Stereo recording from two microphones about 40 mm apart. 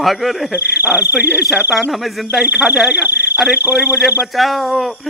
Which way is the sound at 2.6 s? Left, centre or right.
Centre.